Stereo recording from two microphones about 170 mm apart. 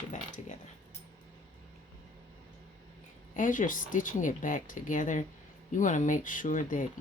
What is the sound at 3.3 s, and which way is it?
Speech, 50° left (ahead or behind).